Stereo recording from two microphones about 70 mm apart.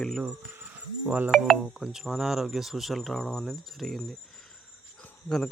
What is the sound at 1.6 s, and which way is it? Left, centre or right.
Speech, centre.